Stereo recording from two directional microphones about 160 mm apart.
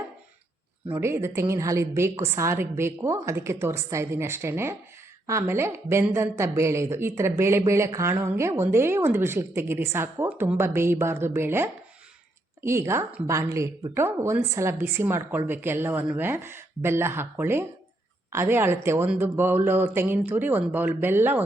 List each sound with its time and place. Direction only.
0.9 s a woman's voice: 15° right (ahead or behind)